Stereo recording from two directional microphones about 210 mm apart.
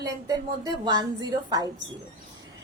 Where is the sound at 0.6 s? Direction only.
20° right (ahead or behind).